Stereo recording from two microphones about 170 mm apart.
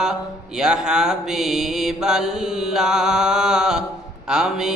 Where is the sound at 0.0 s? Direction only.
5° right (ahead or behind).